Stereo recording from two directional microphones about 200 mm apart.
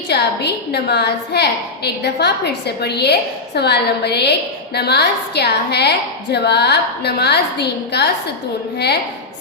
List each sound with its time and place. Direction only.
0.1 s a woman's voice: 55° left (ahead or behind)